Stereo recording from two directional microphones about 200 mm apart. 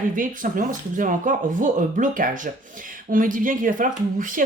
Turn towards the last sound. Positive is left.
turn(degrees=-40)  # may be behind; listen again after turning